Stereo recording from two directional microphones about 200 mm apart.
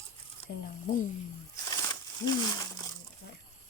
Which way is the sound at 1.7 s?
20° left (ahead or behind).